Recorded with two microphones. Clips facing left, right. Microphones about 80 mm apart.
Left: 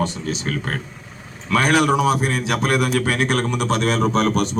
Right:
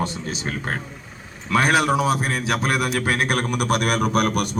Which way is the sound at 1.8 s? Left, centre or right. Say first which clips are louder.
Left 3 dB; centre.